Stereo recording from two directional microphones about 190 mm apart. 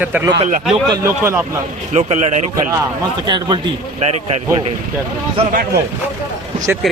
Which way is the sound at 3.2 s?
20° right (ahead or behind).